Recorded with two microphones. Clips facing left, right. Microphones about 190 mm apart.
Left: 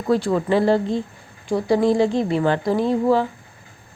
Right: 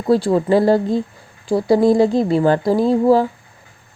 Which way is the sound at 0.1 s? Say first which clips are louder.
Right 4 dB; 35° right (ahead or behind).